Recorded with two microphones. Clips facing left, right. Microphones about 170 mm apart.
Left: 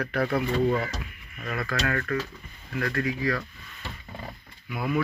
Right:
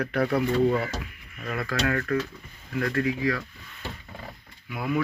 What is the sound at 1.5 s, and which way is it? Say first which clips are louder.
Speech: right 2 dB; 20° right (ahead or behind).